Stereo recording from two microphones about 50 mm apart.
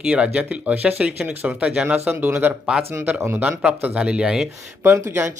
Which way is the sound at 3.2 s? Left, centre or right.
Right.